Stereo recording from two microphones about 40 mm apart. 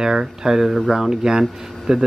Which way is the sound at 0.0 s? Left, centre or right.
Centre.